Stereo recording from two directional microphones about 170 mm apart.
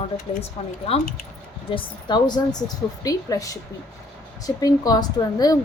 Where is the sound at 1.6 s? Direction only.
30° left (ahead or behind).